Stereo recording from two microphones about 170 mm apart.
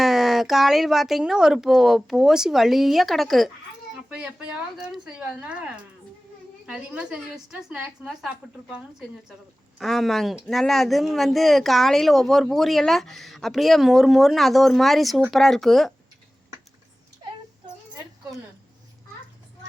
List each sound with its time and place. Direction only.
0.0 s speech: centre (ahead or behind)